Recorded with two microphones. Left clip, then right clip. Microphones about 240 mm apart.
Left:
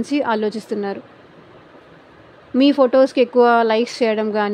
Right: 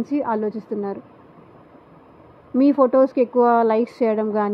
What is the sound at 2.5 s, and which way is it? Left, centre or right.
A woman's voice, centre.